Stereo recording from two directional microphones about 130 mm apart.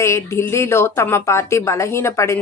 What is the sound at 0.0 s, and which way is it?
Speech, 20° left (ahead or behind).